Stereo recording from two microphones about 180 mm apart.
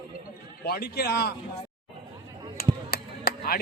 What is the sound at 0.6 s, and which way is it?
Speech, 60° left (ahead or behind).